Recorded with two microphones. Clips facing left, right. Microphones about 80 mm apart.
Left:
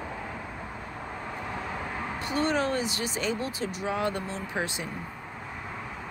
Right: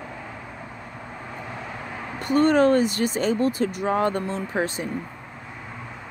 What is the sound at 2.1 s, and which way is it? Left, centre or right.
Speech, right.